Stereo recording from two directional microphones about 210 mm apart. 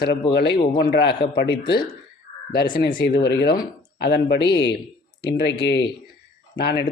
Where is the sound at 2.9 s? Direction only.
55° left (ahead or behind).